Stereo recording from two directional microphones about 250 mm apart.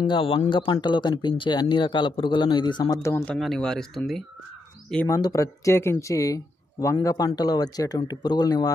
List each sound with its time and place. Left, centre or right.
0.0 s speech: centre
3.3 s speech: centre
5.0 s speech: centre